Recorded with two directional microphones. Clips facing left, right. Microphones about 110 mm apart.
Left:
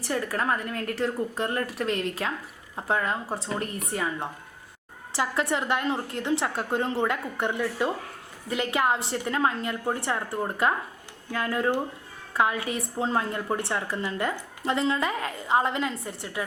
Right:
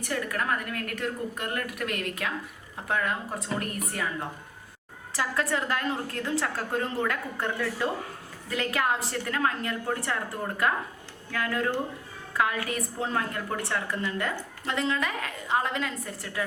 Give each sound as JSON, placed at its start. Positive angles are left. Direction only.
{"t": 0.1, "sound": "a woman's voice", "side_deg": 30}